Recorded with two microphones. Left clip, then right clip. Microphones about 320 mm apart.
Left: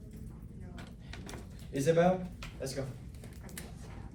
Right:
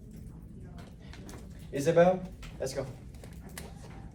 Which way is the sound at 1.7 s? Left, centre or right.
Right.